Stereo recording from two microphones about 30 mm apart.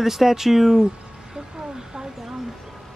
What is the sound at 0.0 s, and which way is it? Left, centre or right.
Speech, centre.